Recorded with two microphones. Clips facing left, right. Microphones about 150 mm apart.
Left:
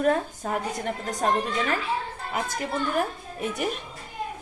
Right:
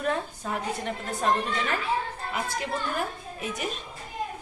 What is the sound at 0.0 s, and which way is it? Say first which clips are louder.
Speech: left 5 dB; 45° left (ahead or behind).